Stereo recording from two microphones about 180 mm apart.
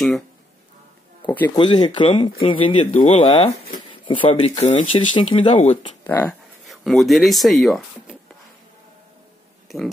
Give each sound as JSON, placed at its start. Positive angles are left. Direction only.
{"t": 1.2, "sound": "speech", "side_deg": 10}
{"t": 1.5, "sound": "speech", "side_deg": 25}
{"t": 6.0, "sound": "speech", "side_deg": 10}